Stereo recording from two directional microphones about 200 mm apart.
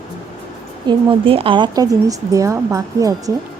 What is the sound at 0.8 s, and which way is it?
A woman's voice, 25° right (ahead or behind).